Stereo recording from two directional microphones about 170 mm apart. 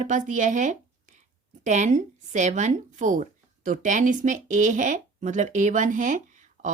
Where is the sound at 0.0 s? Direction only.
45° right (ahead or behind).